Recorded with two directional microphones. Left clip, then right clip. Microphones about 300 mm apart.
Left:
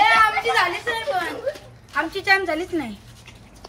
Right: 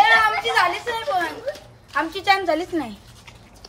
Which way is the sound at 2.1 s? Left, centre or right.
Right.